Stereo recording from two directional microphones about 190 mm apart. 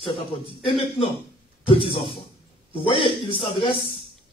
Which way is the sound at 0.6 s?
25° left (ahead or behind).